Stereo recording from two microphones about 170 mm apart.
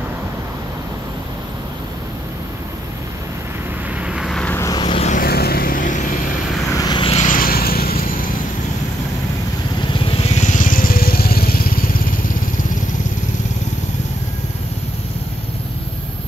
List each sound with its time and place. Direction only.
4.0 s vehicle: 5° right (ahead or behind); by 5.0 s 25° left (ahead or behind)
5.0 s vehicle: 50° left (ahead or behind)
5.3 s vehicle: 65° left (ahead or behind)
6.7 s vehicle: 25° left (ahead or behind)
7.2 s vehicle: 55° left (ahead or behind)
9.9 s vehicle: 30° left (ahead or behind); by 11.9 s 60° left (ahead or behind)